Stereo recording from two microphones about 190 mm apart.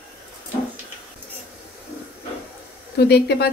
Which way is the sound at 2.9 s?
60° left (ahead or behind).